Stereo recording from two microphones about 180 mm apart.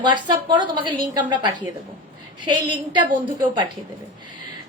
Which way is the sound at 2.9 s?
25° right (ahead or behind).